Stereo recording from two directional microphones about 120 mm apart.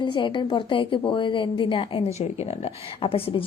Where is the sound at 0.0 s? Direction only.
45° left (ahead or behind).